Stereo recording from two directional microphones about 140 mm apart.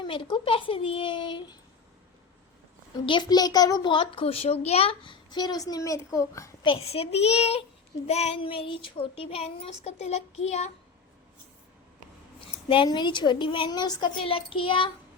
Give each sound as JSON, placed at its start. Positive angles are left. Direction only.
{"t": 0.0, "sound": "a child's voice", "side_deg": 35}
{"t": 3.1, "sound": "a child's voice", "side_deg": 30}
{"t": 6.7, "sound": "speech", "side_deg": 45}
{"t": 12.6, "sound": "a child's voice", "side_deg": 40}